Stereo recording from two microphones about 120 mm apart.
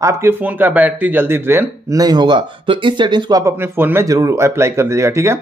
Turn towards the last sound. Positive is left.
turn(degrees=-20)  # may be behind; listen again after turning